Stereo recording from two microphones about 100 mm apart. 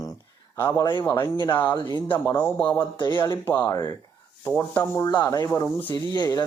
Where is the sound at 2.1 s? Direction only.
25° left (ahead or behind).